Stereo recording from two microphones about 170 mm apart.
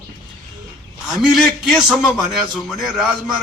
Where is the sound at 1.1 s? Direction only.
Centre (ahead or behind).